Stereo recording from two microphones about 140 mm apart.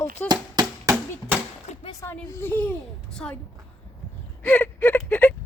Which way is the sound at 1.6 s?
55° left (ahead or behind).